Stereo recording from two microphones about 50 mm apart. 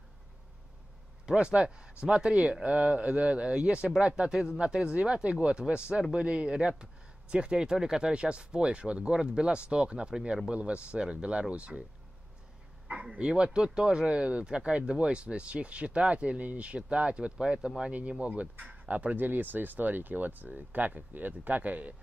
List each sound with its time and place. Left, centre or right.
1.2 s speech: centre
13.2 s speech: centre